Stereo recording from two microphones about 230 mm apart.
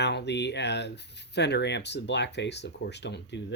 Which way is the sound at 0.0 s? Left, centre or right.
Left.